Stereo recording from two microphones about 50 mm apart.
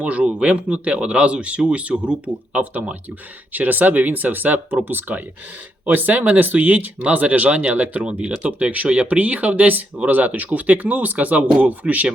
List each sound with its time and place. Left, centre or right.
0.0 s speech: right